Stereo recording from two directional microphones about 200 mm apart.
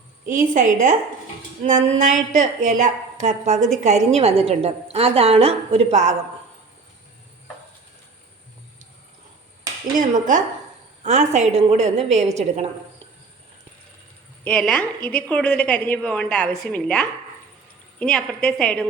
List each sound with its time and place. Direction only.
0.3 s a woman's voice: 40° right (ahead or behind)
10.0 s a woman's voice: 40° right (ahead or behind)
14.4 s a woman's voice: 5° left (ahead or behind)